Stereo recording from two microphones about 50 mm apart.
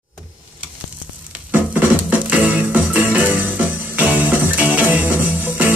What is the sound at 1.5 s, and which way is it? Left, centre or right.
Music, right.